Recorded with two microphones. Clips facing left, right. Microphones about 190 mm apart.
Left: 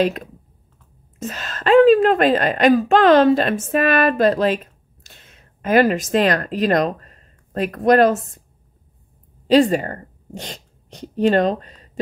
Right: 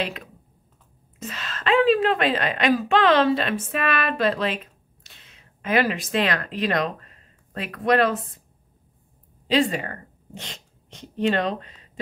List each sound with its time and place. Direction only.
1.2 s a woman's voice: 45° left (ahead or behind)
9.5 s a woman's voice: 40° left (ahead or behind)